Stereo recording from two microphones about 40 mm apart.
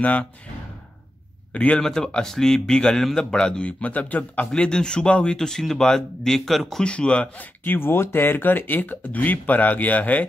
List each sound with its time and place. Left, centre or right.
0.0 s a man's voice: left
1.5 s a man's voice: left
1.8 s speech: centre
3.6 s a man's voice: left
4.6 s speech: left; by 6.8 s centre
6.8 s speech: left
7.3 s speech: left